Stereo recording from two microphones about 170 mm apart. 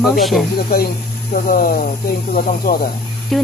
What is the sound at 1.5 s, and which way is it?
Speech, 55° left (ahead or behind).